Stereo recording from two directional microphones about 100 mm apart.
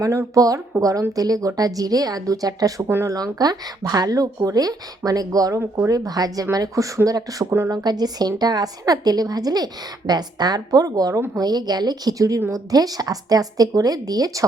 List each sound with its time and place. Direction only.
0.0 s speech: 30° right (ahead or behind)
2.8 s speech: 20° right (ahead or behind)
3.1 s speech: 35° right (ahead or behind)